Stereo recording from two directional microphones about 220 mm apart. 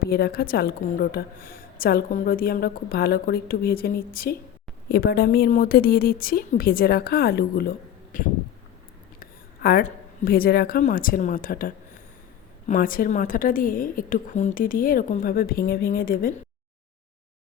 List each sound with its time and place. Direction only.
0.0 s a woman's voice: 45° left (ahead or behind)
9.2 s a woman's voice: 45° left (ahead or behind)